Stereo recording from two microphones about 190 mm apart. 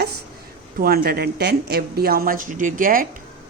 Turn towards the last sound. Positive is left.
turn(degrees=-45)  # may be behind; listen again after turning